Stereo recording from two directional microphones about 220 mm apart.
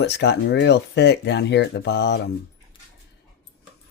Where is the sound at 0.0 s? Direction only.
50° left (ahead or behind).